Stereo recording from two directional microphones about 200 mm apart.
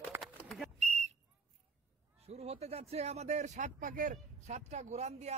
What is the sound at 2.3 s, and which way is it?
Speech, 30° right (ahead or behind).